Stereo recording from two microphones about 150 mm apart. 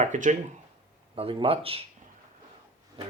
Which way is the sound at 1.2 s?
40° right (ahead or behind).